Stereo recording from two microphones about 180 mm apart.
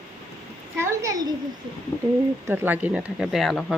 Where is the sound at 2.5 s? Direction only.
10° right (ahead or behind).